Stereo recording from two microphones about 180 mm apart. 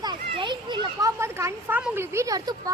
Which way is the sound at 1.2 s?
15° right (ahead or behind).